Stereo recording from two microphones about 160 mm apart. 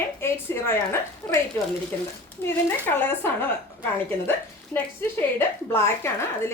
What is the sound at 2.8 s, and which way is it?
A woman's voice, 15° left (ahead or behind).